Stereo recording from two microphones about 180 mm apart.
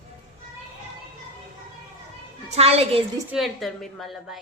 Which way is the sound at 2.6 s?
35° right (ahead or behind).